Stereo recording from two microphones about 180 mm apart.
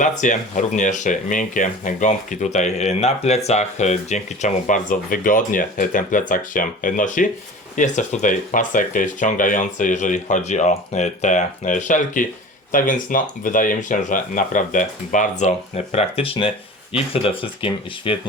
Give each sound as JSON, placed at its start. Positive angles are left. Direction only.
{"t": 0.0, "sound": "speech", "side_deg": 45}